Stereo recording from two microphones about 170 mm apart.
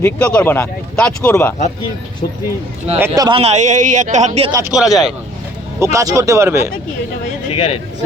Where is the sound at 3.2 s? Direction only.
30° right (ahead or behind).